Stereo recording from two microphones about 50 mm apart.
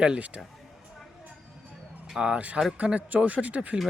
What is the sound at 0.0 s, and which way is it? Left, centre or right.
Speech, right.